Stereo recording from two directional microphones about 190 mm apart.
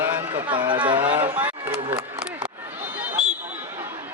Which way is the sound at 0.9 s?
25° right (ahead or behind).